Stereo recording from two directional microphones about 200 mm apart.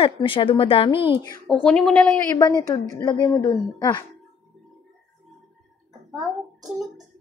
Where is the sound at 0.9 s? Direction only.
10° right (ahead or behind).